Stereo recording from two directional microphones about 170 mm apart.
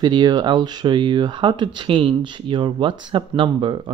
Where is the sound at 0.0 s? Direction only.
25° right (ahead or behind).